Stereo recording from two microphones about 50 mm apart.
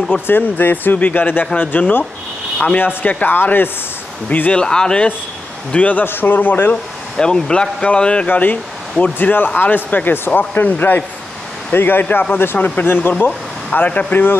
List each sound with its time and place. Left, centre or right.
0.3 s speech: left
4.3 s speech: left
4.6 s speech: centre
5.7 s speech: left
6.0 s speech: left
7.2 s speech: centre
8.3 s speech: left
10.1 s speech: left
12.8 s speech: left